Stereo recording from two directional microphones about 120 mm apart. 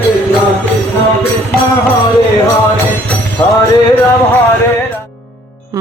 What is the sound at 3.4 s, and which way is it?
Music, 15° left (ahead or behind).